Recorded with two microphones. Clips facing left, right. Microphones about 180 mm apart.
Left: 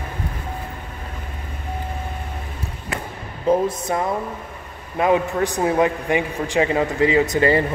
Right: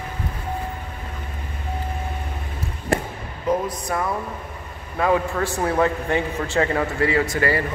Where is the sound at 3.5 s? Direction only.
25° left (ahead or behind).